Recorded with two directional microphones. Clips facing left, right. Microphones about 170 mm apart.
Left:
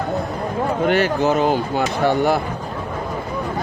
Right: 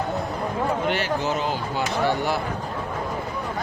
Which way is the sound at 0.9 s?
50° left (ahead or behind).